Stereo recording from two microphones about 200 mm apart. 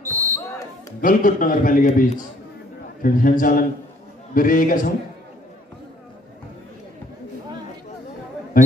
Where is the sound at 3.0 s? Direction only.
45° left (ahead or behind).